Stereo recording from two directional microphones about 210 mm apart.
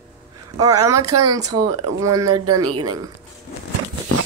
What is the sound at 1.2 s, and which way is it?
Speech, 15° right (ahead or behind).